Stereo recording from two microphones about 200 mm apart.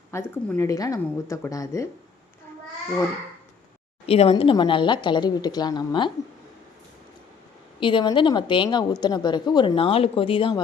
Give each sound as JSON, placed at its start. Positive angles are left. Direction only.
{"t": 0.1, "sound": "a woman's voice", "side_deg": 10}
{"t": 4.0, "sound": "a woman's voice", "side_deg": 30}
{"t": 7.8, "sound": "a woman's voice", "side_deg": 25}